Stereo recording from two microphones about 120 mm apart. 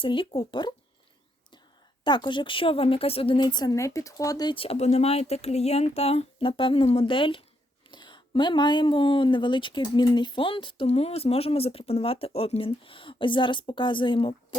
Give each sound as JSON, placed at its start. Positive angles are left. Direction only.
{"t": 0.0, "sound": "speech", "side_deg": 45}
{"t": 2.0, "sound": "a woman's voice", "side_deg": 40}
{"t": 4.5, "sound": "speech", "side_deg": 50}